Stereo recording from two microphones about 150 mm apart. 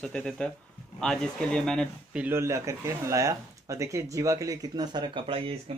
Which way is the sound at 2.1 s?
15° right (ahead or behind).